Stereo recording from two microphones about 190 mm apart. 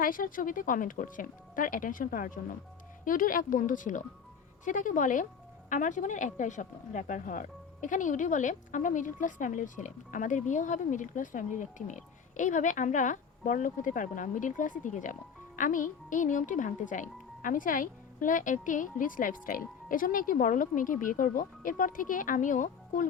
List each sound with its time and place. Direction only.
0.0 s speech: 45° left (ahead or behind)